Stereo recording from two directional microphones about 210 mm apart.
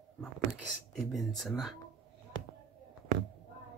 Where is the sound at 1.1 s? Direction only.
Centre (ahead or behind).